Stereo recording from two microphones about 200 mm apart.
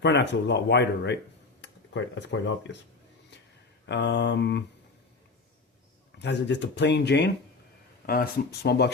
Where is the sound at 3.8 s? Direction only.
60° left (ahead or behind).